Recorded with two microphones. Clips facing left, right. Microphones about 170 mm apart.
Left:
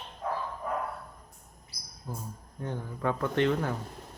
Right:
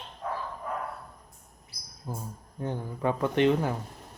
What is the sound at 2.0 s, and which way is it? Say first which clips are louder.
Speech: right 2 dB; 15° right (ahead or behind).